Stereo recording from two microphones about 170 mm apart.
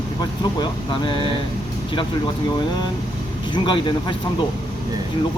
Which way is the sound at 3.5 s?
25° left (ahead or behind).